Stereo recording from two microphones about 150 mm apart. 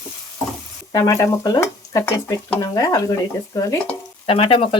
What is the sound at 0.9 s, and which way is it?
Speech, 20° left (ahead or behind).